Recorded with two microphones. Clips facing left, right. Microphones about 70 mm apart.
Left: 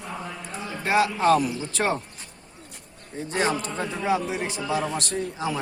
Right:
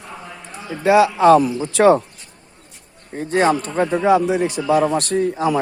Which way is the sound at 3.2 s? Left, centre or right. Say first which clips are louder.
Right 8 dB; right.